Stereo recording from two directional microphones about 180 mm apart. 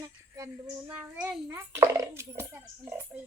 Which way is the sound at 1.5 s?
15° right (ahead or behind).